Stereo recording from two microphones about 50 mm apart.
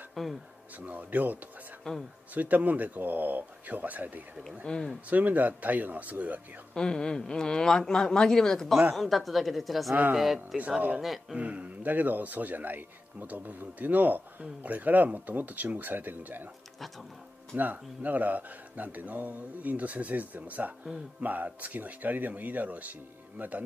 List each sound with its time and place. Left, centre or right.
0.1 s speech: centre
0.7 s speech: right
1.9 s speech: centre
2.3 s speech: right
4.7 s speech: centre
5.1 s speech: right
6.7 s speech: centre
11.3 s speech: right
17.6 s speech: right